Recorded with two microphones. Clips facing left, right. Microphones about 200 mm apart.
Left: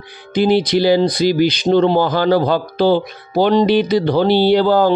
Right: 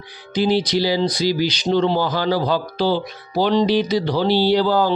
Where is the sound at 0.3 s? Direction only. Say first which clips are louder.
Left 4 dB; 55° left (ahead or behind).